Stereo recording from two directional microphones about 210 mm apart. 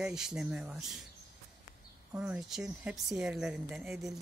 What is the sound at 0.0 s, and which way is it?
A woman's voice, 5° right (ahead or behind).